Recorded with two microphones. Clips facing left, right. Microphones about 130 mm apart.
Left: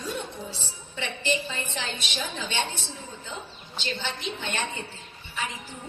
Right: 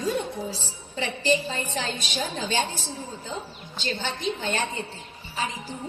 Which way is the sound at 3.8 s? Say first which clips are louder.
Right 4 dB; 45° right (ahead or behind).